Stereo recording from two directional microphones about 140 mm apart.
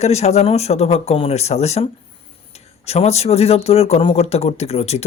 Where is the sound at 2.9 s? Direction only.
50° left (ahead or behind).